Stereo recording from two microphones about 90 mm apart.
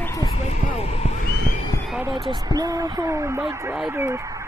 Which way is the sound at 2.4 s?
45° right (ahead or behind).